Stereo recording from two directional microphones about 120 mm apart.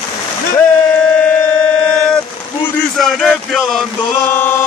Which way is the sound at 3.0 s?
5° left (ahead or behind).